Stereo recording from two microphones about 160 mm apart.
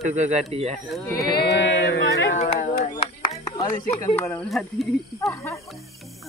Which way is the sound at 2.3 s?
45° left (ahead or behind).